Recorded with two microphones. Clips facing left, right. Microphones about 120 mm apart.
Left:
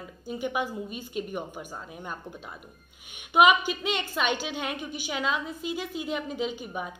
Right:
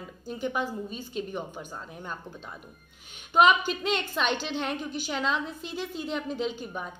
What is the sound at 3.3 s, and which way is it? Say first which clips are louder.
A woman's voice: left 1 dB; 10° left (ahead or behind).